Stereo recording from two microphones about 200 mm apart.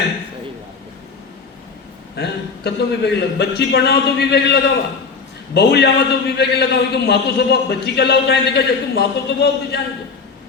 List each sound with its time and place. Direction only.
2.1 s a man's voice: 55° left (ahead or behind)